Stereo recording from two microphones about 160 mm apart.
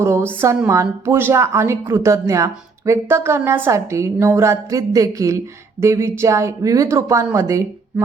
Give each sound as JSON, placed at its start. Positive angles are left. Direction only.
{"t": 0.0, "sound": "a woman's voice", "side_deg": -15}